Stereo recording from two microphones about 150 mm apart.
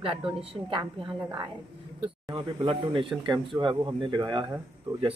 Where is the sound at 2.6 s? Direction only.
35° right (ahead or behind).